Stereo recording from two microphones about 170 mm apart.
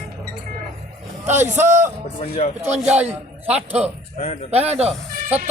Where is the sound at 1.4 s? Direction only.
45° right (ahead or behind).